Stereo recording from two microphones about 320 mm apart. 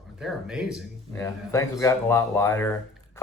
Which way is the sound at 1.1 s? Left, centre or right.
Centre.